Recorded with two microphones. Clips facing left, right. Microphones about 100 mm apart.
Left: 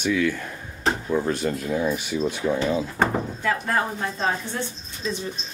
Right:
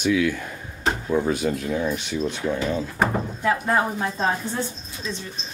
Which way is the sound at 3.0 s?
15° right (ahead or behind).